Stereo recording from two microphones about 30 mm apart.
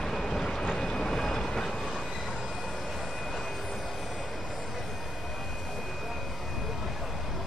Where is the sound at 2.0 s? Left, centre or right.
Centre.